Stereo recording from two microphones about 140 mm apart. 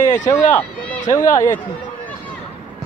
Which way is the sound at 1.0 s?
65° left (ahead or behind).